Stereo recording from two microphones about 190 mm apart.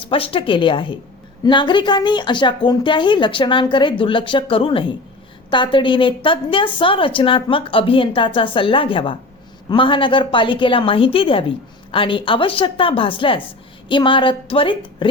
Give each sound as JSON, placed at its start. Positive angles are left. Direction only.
{"t": 0.0, "sound": "a woman's voice", "side_deg": 30}